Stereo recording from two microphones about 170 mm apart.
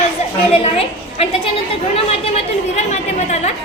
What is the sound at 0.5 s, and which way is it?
Speech, 35° left (ahead or behind).